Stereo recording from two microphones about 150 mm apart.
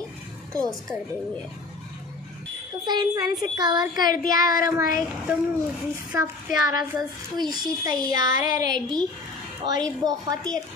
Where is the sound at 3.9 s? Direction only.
70° left (ahead or behind).